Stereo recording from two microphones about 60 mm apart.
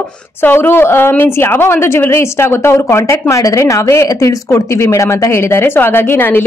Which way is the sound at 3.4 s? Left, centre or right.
Left.